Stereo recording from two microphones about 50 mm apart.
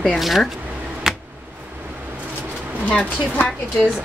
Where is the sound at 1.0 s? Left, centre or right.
Centre.